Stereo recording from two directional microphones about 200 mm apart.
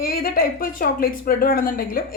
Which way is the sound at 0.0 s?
45° left (ahead or behind).